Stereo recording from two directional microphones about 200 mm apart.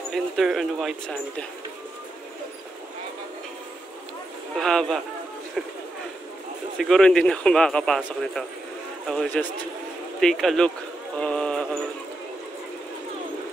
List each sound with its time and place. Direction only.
0.1 s a man's voice: centre (ahead or behind)
4.6 s a man's voice: centre (ahead or behind)
6.8 s a man's voice: 5° left (ahead or behind)
11.1 s music: 5° left (ahead or behind)